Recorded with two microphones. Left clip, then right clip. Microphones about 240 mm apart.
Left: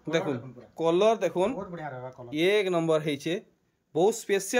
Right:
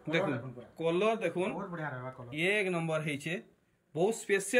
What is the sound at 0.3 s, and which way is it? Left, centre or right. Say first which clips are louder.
Speech: left 4 dB; centre.